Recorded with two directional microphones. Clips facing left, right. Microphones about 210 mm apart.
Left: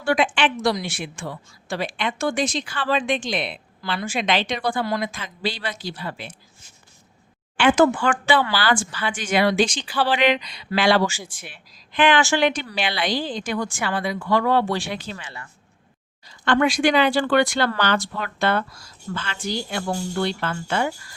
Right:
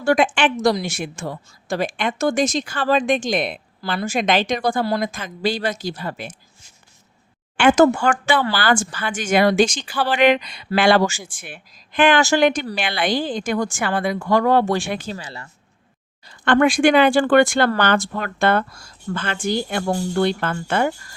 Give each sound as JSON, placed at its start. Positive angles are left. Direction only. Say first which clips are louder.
{"t": 0.0, "sound": "a woman's voice", "louder": "right 3 dB", "side_deg": -45}
{"t": 7.5, "sound": "a woman's voice", "louder": "right 3 dB", "side_deg": -45}
{"t": 15.1, "sound": "speech", "louder": "right 4 dB", "side_deg": -35}
{"t": 16.3, "sound": "a woman's voice", "louder": "right 4 dB", "side_deg": -55}